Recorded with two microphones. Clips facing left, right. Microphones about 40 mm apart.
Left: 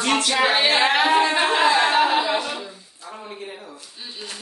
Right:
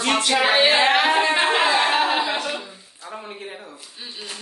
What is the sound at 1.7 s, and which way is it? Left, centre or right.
Speech, centre.